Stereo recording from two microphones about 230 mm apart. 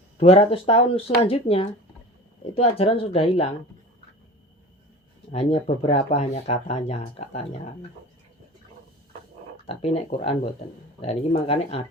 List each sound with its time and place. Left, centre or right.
0.2 s speech: left
5.3 s speech: left
9.6 s speech: left